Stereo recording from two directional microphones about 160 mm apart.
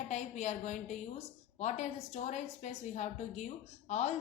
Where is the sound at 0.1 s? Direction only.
45° left (ahead or behind).